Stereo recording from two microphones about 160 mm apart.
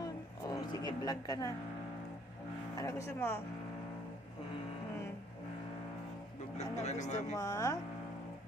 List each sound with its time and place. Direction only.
0.0 s a sound: 25° left (ahead or behind)
2.7 s speech: 20° left (ahead or behind)
6.6 s speech: 45° left (ahead or behind)
7.3 s speech: 20° left (ahead or behind)